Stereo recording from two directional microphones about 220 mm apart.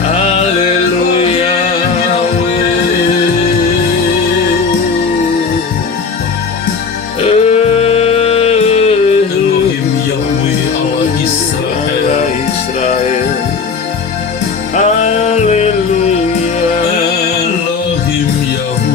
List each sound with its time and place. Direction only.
7.3 s music: 30° left (ahead or behind)
15.3 s music: 30° left (ahead or behind)